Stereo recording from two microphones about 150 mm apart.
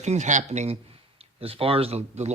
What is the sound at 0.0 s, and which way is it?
A man's voice, 50° right (ahead or behind).